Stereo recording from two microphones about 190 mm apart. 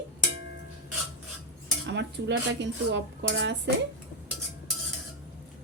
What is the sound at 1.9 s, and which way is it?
Speech, 65° right (ahead or behind).